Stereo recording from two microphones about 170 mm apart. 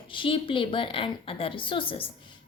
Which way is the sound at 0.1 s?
30° left (ahead or behind).